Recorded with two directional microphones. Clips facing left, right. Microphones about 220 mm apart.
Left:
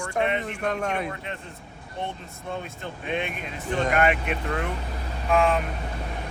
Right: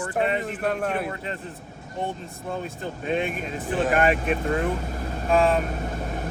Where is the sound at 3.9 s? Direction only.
35° right (ahead or behind).